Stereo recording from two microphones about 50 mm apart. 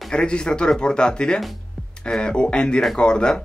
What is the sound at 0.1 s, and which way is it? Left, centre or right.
Speech, centre.